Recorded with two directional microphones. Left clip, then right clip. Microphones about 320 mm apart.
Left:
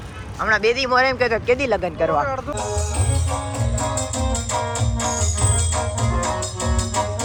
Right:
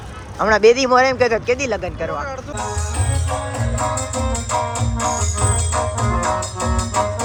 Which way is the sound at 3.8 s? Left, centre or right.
Centre.